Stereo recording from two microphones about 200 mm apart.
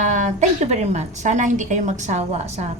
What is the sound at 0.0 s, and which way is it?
Speech, 35° right (ahead or behind).